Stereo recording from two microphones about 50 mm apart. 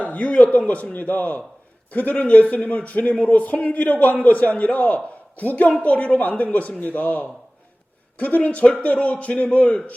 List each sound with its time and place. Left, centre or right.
0.0 s a man's voice: left